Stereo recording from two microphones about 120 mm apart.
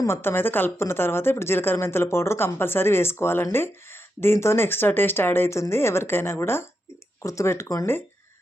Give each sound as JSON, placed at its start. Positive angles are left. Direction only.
{"t": 0.0, "sound": "a woman's voice", "side_deg": 20}